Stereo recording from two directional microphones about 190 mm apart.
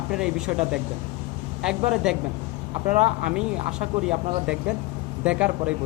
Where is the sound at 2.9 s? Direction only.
35° right (ahead or behind).